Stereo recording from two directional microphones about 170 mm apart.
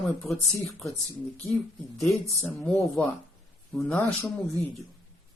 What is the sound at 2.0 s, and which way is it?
Speech, centre (ahead or behind).